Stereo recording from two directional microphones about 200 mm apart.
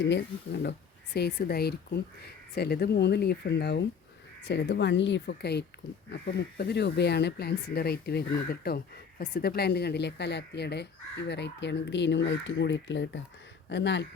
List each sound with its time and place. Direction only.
0.0 s speech: 55° left (ahead or behind)